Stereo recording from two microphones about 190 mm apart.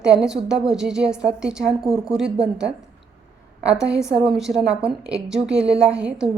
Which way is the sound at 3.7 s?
5° right (ahead or behind).